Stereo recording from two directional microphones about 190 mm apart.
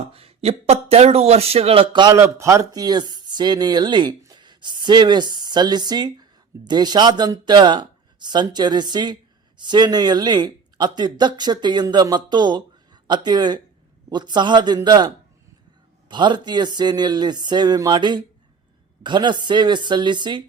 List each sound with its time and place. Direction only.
0.1 s speech: 30° right (ahead or behind)